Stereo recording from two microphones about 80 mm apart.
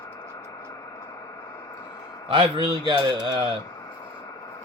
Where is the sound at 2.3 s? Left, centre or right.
Right.